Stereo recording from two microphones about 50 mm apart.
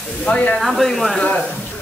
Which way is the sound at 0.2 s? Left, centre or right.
Left.